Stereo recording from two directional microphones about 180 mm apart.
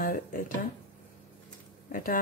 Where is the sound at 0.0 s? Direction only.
50° left (ahead or behind).